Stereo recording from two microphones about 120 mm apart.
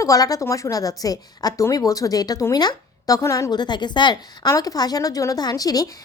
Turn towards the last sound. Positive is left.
turn(degrees=30)  # may be behind; listen again after turning